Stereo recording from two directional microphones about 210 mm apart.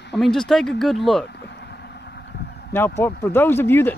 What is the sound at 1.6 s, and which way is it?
Vehicle, 50° left (ahead or behind).